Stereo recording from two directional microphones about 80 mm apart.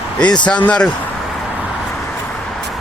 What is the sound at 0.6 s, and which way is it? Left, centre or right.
Speech, centre.